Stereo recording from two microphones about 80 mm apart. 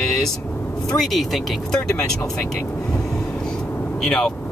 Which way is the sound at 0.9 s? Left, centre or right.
Centre.